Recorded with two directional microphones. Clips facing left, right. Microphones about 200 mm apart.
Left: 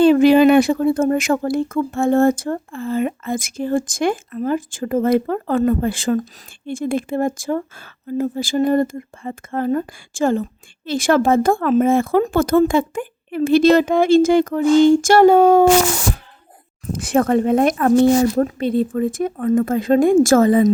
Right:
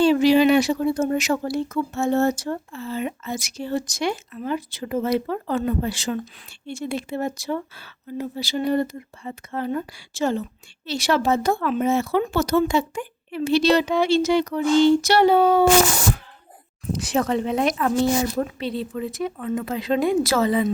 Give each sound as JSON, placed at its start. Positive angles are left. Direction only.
{"t": 0.0, "sound": "speech", "side_deg": 55}
{"t": 16.9, "sound": "speech", "side_deg": 55}